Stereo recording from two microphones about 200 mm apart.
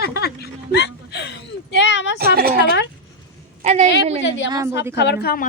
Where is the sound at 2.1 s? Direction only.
50° right (ahead or behind).